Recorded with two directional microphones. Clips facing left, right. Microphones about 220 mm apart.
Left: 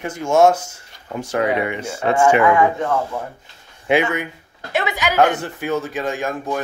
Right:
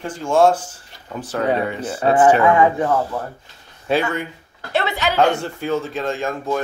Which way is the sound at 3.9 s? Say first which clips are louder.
Left 2 dB; 15° left (ahead or behind).